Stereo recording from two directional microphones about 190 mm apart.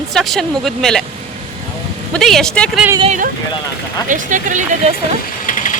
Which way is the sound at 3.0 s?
40° right (ahead or behind).